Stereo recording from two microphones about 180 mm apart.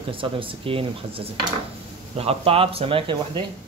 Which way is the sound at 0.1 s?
30° right (ahead or behind).